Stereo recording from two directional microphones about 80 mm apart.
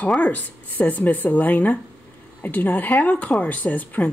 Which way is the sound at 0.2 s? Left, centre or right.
Centre.